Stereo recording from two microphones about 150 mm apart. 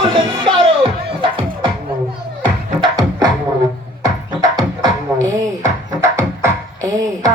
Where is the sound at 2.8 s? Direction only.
25° right (ahead or behind).